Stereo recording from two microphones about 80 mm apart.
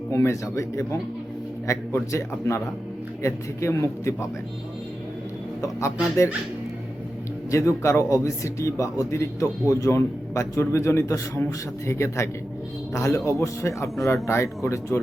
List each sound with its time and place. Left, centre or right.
0.1 s a man's voice: left
5.6 s a man's voice: left
7.5 s a man's voice: left